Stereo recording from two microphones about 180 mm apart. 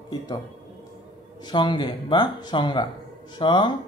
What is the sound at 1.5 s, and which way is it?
Speech, 25° left (ahead or behind).